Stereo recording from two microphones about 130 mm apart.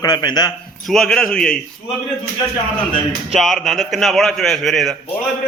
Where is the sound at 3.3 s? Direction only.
Centre (ahead or behind).